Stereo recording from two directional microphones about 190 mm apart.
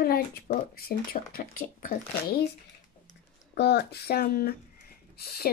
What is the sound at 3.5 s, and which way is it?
Speech, 60° left (ahead or behind).